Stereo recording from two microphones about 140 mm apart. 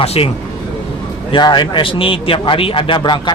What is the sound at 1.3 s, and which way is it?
A man's voice, 35° left (ahead or behind).